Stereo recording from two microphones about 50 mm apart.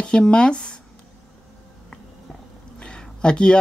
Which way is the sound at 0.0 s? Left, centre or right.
Centre.